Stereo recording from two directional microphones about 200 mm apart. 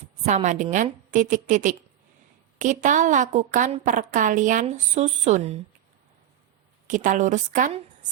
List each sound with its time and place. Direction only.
0.3 s a woman's voice: 35° right (ahead or behind)
6.8 s a woman's voice: 40° right (ahead or behind)